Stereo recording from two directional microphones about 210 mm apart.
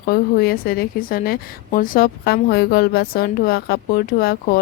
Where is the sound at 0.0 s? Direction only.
45° left (ahead or behind).